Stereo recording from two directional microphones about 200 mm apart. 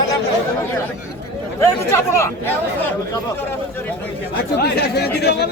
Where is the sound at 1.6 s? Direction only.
15° left (ahead or behind).